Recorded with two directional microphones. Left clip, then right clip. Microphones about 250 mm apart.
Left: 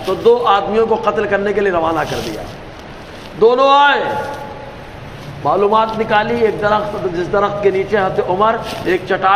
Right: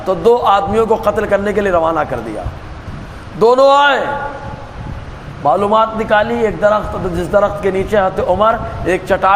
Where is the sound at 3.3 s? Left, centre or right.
Right.